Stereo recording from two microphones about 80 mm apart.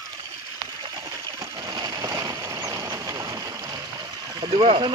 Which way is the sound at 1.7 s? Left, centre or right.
Right.